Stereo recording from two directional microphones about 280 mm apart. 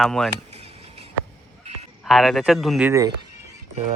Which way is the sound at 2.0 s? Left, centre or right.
Centre.